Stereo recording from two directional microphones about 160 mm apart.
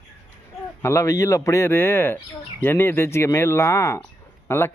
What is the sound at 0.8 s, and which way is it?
Speech, 15° left (ahead or behind).